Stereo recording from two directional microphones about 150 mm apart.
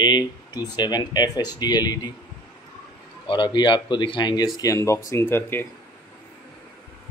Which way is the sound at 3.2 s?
30° left (ahead or behind).